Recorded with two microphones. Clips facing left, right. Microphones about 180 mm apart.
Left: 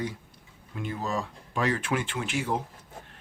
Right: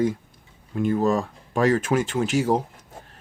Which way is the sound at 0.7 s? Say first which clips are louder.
Right 10 dB; 45° right (ahead or behind).